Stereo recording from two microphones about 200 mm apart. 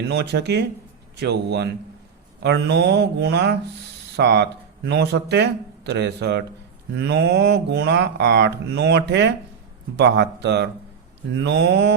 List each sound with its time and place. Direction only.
0.1 s speech: 55° right (ahead or behind)